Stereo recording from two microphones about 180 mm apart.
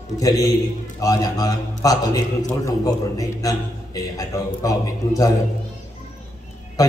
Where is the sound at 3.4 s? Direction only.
20° left (ahead or behind).